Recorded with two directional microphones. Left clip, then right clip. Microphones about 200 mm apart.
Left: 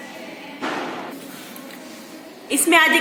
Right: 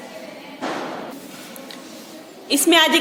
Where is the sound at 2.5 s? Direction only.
60° right (ahead or behind).